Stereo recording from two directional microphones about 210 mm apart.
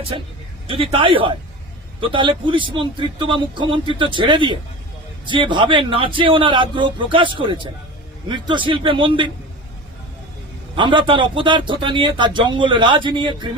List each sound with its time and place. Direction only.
0.1 s speech: 25° right (ahead or behind)
10.8 s speech: 20° right (ahead or behind)